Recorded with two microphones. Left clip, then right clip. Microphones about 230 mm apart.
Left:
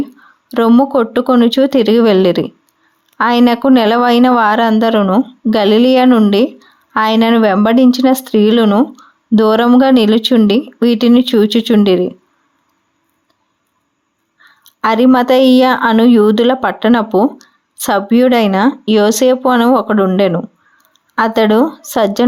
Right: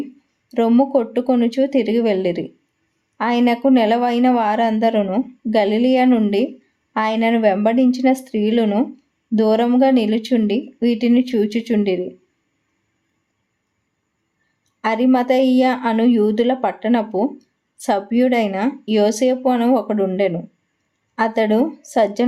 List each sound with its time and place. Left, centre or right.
0.4 s a woman's voice: left
14.6 s a woman's voice: left